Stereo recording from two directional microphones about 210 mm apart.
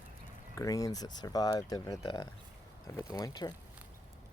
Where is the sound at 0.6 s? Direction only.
15° left (ahead or behind).